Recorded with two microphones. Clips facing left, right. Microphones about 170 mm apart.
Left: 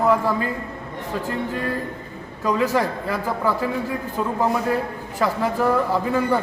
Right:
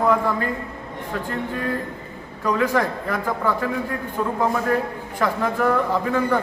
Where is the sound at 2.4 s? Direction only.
10° left (ahead or behind).